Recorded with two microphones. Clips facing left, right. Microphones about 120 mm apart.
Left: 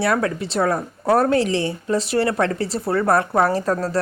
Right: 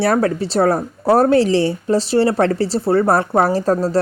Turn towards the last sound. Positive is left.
turn(degrees=-30)  # may be behind; listen again after turning